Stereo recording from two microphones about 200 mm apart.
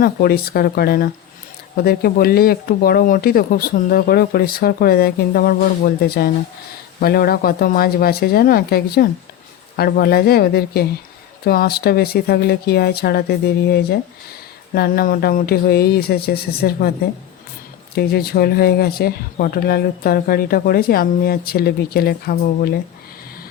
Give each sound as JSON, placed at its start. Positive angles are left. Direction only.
{"t": 0.0, "sound": "speech", "side_deg": 50}
{"t": 17.9, "sound": "speech", "side_deg": 50}